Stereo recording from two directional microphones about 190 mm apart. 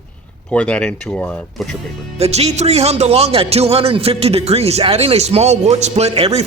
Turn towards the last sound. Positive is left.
turn(degrees=-35)  # may be behind; listen again after turning